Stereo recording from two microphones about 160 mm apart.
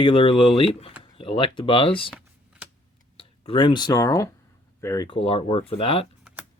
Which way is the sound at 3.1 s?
35° left (ahead or behind).